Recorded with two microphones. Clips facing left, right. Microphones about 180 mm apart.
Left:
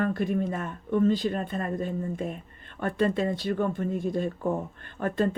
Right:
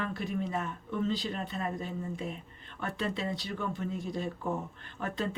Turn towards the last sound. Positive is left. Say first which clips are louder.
# left 8 dB
turn(degrees=50)  # may be behind; listen again after turning